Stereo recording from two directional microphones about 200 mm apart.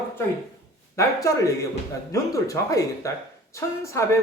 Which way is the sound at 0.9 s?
15° left (ahead or behind).